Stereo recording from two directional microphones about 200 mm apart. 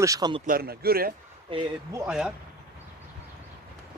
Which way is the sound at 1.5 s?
25° right (ahead or behind).